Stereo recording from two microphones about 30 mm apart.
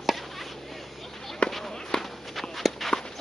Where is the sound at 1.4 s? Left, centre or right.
Left.